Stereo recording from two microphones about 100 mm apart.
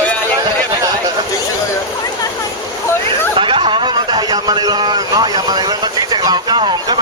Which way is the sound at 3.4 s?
55° right (ahead or behind).